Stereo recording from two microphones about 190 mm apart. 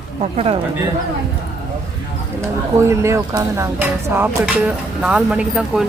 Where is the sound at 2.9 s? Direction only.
15° right (ahead or behind).